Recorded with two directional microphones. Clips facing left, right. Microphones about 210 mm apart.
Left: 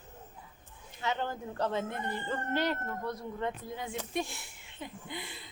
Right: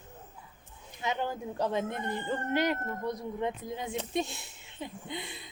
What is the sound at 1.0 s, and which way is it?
Speech, 10° right (ahead or behind).